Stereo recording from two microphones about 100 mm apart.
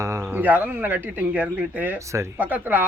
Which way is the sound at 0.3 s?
15° right (ahead or behind).